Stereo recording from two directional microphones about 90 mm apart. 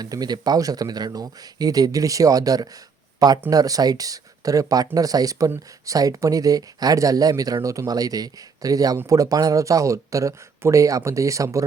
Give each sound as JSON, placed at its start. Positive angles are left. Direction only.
{"t": 0.0, "sound": "speech", "side_deg": -50}